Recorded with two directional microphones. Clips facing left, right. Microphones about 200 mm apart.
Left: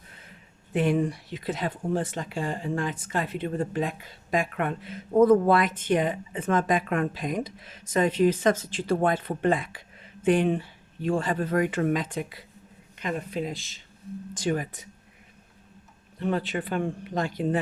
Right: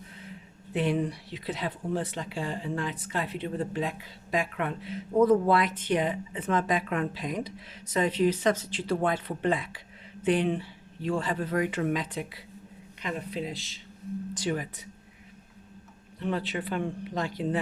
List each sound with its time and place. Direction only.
0.7 s speech: 50° left (ahead or behind)
16.2 s speech: 50° left (ahead or behind)